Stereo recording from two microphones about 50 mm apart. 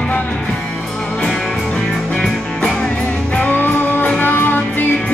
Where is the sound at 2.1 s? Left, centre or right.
Centre.